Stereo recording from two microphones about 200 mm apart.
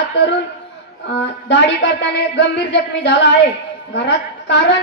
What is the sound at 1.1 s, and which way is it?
A woman's voice, 60° left (ahead or behind).